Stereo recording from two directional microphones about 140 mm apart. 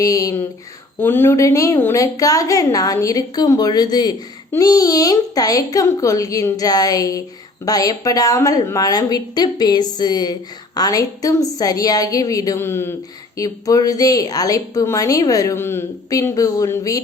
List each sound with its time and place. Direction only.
0.0 s a woman's voice: 25° left (ahead or behind)
0.9 s a woman's voice: 15° left (ahead or behind)